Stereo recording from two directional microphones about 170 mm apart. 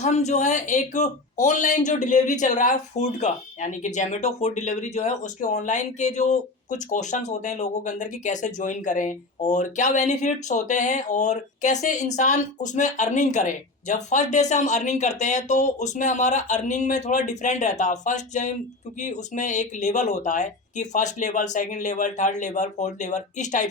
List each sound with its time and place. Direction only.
0.0 s speech: 40° left (ahead or behind)